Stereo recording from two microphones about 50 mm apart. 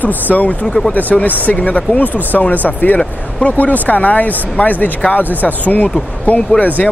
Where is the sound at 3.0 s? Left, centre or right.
Left.